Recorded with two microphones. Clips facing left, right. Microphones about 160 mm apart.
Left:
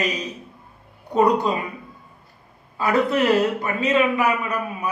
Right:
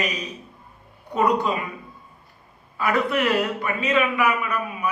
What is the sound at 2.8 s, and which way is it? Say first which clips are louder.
A man's voice: left 2 dB; 35° left (ahead or behind).